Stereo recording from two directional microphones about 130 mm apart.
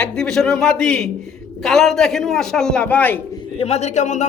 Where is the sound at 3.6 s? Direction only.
55° left (ahead or behind).